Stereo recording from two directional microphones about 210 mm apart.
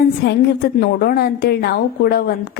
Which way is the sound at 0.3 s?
50° left (ahead or behind).